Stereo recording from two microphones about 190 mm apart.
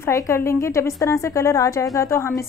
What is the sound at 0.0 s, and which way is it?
A woman's voice, 15° left (ahead or behind).